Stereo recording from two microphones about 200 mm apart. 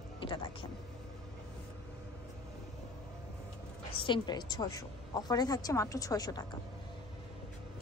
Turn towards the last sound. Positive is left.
turn(degrees=20)  # may be behind; listen again after turning